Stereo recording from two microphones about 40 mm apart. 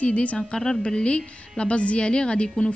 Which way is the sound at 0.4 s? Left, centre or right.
Centre.